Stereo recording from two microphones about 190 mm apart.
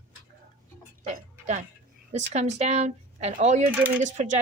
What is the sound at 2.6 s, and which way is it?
Speech, 35° right (ahead or behind).